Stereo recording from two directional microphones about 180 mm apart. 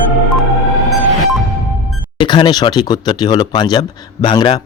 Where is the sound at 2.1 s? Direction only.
25° left (ahead or behind).